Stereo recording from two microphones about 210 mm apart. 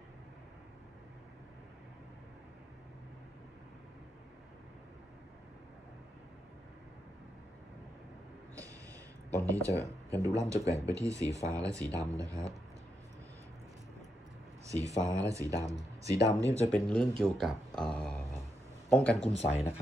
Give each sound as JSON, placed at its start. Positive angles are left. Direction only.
{"t": 9.3, "sound": "speech", "side_deg": -15}
{"t": 14.7, "sound": "speech", "side_deg": -15}
{"t": 16.7, "sound": "speech", "side_deg": 5}
{"t": 19.3, "sound": "speech", "side_deg": 30}